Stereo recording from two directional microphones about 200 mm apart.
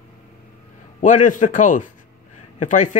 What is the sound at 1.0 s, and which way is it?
Speech, 40° left (ahead or behind).